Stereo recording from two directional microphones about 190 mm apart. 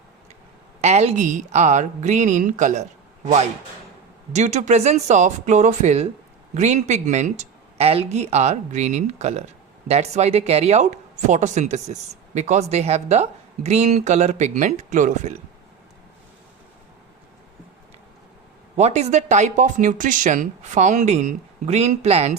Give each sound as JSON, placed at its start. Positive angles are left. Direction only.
{"t": 0.8, "sound": "speech", "side_deg": -35}
{"t": 4.3, "sound": "speech", "side_deg": -35}
{"t": 18.8, "sound": "speech", "side_deg": -35}